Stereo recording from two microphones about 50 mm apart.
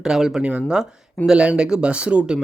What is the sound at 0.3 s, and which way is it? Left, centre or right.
Speech, right.